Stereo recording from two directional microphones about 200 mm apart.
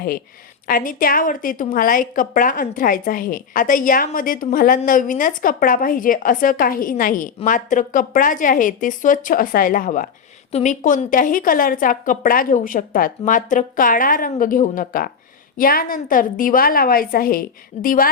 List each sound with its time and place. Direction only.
0.7 s a woman's voice: 45° left (ahead or behind)